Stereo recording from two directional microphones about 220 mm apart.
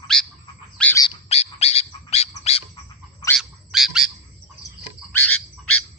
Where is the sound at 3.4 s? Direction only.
Centre (ahead or behind).